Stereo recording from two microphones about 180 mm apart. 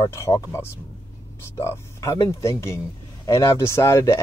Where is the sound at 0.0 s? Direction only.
15° left (ahead or behind).